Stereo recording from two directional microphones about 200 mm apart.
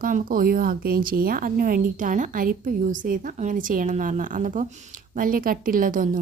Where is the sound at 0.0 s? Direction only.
45° right (ahead or behind).